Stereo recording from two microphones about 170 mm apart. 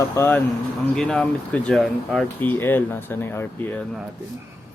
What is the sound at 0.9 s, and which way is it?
Speech, 5° left (ahead or behind).